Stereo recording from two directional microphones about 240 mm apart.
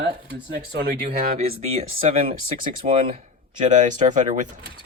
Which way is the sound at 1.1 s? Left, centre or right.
Right.